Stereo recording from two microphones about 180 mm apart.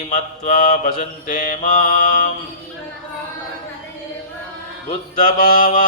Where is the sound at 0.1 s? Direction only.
45° left (ahead or behind).